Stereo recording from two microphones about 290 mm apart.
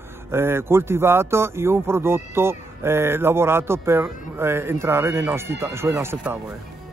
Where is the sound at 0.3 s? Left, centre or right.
Centre.